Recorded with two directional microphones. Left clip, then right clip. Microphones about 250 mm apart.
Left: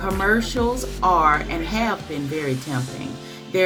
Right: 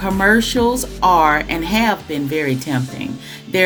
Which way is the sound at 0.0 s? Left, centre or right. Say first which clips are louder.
Right 6 dB; right.